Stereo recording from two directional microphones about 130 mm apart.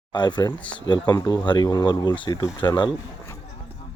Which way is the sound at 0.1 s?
35° left (ahead or behind).